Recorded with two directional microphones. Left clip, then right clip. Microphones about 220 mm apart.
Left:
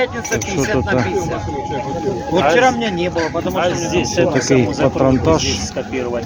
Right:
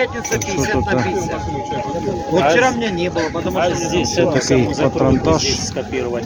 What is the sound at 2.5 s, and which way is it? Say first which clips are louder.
Speech: left 2 dB; 5° left (ahead or behind).